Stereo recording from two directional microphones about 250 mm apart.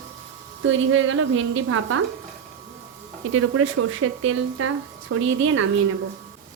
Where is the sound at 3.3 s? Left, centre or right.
Right.